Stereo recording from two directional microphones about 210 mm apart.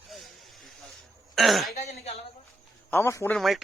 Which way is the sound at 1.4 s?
Centre (ahead or behind).